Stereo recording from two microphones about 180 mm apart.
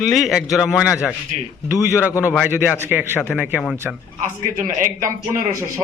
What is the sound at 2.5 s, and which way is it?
A man's voice, 10° right (ahead or behind).